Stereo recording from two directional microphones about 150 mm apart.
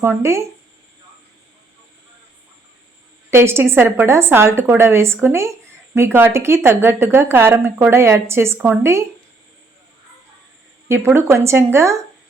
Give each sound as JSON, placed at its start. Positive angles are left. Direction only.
{"t": 0.0, "sound": "a woman's voice", "side_deg": -15}
{"t": 3.2, "sound": "a woman's voice", "side_deg": -15}
{"t": 10.8, "sound": "a woman's voice", "side_deg": -15}